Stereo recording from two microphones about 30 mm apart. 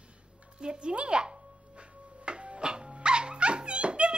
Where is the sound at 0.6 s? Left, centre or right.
Right.